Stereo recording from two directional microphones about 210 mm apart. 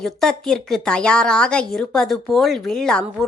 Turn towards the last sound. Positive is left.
turn(degrees=5)  # may be behind; listen again after turning